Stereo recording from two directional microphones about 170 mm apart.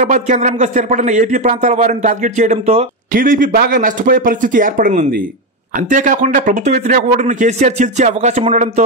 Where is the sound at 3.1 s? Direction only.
55° right (ahead or behind).